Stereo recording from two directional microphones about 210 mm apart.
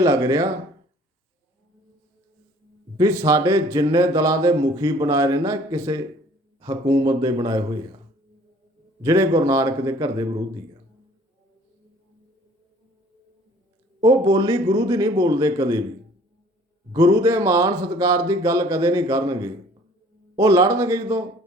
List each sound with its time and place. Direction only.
0.0 s speech: 15° right (ahead or behind)
3.0 s speech: 15° right (ahead or behind)
9.0 s speech: 15° right (ahead or behind)
14.0 s speech: 15° right (ahead or behind)
16.9 s speech: 15° right (ahead or behind)